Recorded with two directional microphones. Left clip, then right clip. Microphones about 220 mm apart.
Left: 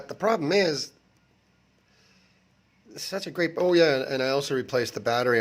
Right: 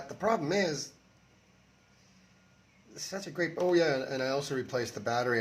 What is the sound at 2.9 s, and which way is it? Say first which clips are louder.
Speech: left 7 dB; 40° left (ahead or behind).